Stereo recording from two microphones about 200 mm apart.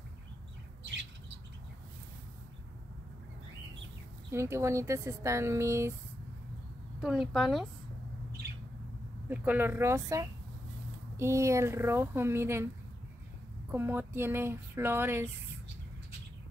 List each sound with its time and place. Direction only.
4.3 s speech: 15° right (ahead or behind)
7.0 s a woman's voice: centre (ahead or behind)
9.3 s speech: 10° right (ahead or behind)
13.7 s speech: 10° right (ahead or behind)